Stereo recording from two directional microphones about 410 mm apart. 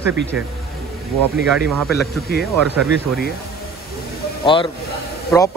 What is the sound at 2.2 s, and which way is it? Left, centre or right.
Speech, left.